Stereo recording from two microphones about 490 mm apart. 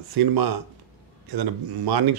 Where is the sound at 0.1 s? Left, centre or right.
Right.